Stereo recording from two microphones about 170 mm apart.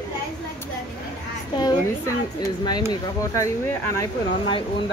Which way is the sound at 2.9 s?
20° left (ahead or behind).